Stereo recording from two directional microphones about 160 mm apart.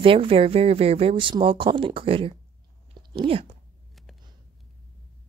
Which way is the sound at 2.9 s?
35° right (ahead or behind).